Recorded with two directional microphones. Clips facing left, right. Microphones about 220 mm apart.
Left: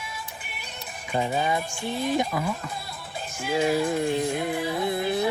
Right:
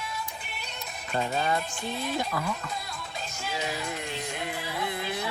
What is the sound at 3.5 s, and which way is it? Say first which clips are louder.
Music: left 11 dB; 50° left (ahead or behind).